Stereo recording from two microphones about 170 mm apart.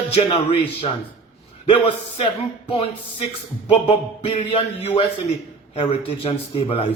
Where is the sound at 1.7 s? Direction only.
35° left (ahead or behind).